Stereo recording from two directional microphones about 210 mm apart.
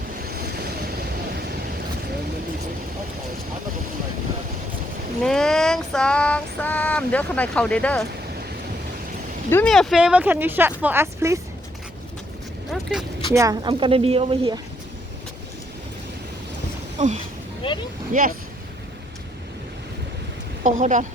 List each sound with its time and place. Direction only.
0.3 s waves: 50° right (ahead or behind)
5.2 s female singing: 5° left (ahead or behind)
9.5 s speech: 5° left (ahead or behind); by 11.3 s 10° right (ahead or behind)
12.7 s speech: centre (ahead or behind)
13.3 s speech: 15° right (ahead or behind)
17.0 s speech: 35° right (ahead or behind)
17.6 s vehicle: 25° left (ahead or behind)
18.1 s speech: 40° right (ahead or behind)
20.7 s speech: 35° right (ahead or behind)